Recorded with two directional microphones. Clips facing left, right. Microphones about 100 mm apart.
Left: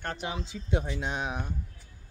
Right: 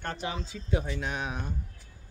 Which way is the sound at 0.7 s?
20° left (ahead or behind).